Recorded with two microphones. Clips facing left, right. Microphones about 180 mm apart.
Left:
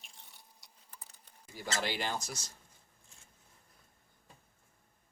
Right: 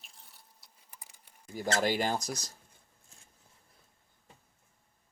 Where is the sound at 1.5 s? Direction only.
50° right (ahead or behind).